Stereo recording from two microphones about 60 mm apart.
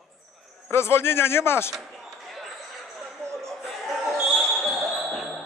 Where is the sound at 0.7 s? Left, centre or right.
Left.